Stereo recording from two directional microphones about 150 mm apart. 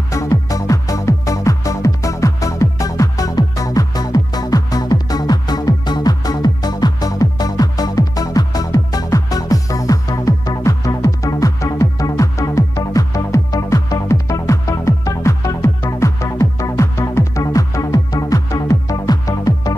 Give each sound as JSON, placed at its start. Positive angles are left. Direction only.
{"t": 0.1, "sound": "music", "side_deg": 20}